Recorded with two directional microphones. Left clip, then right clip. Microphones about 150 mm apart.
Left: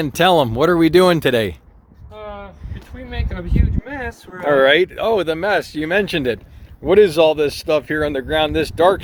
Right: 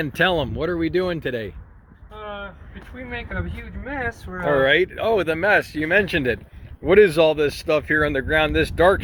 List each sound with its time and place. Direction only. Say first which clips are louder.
0.0 s speech: left 6 dB; 45° left (ahead or behind); by 1.5 s 90° left
2.1 s a sound: left 1 dB; 10° left (ahead or behind)
3.8 s speech: even; 5° right (ahead or behind)
4.4 s speech: left 5 dB; 80° left; by 9.0 s 25° left (ahead or behind)